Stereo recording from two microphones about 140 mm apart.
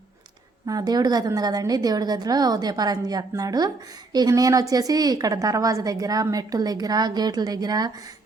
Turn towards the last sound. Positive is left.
turn(degrees=-30)  # may be behind; listen again after turning